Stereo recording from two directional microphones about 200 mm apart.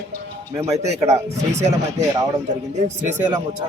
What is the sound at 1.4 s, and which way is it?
Speech, 35° right (ahead or behind).